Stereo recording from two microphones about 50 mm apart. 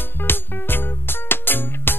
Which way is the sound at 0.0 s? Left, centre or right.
Left.